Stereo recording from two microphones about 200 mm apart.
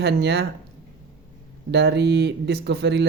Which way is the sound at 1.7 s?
55° right (ahead or behind).